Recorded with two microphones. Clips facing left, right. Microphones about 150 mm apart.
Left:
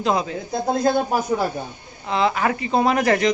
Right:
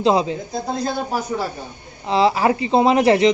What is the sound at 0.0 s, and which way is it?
Speech, 30° right (ahead or behind).